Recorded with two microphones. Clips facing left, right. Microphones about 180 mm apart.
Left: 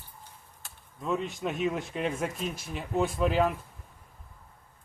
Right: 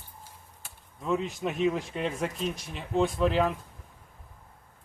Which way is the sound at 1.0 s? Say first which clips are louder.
Right 1 dB; centre (ahead or behind).